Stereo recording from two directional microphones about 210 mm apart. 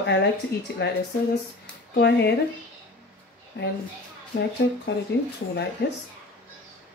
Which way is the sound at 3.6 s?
55° left (ahead or behind).